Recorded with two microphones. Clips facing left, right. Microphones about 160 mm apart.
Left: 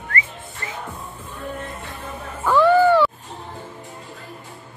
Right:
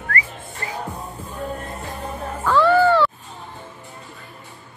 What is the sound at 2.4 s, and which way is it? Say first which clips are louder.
Music: left 1 dB; 15° left (ahead or behind).